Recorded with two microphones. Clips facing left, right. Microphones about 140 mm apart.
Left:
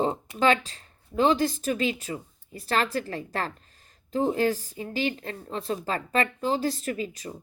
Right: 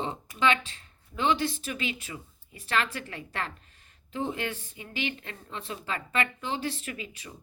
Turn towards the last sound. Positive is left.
turn(degrees=40)  # may be behind; listen again after turning